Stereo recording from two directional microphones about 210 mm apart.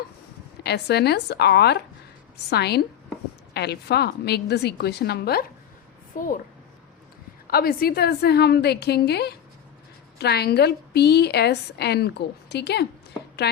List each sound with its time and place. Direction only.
0.6 s a woman's voice: 50° left (ahead or behind)
7.4 s a woman's voice: 45° left (ahead or behind)